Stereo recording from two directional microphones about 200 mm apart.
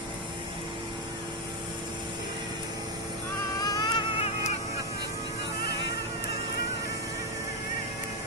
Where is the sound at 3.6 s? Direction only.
20° left (ahead or behind).